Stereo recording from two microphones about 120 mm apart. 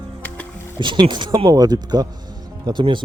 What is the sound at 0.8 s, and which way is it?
Speech, 40° right (ahead or behind).